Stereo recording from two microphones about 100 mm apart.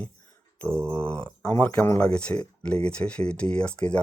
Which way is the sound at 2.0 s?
10° left (ahead or behind).